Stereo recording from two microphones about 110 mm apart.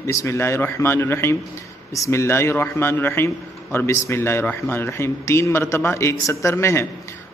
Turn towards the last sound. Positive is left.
turn(degrees=25)  # may be behind; listen again after turning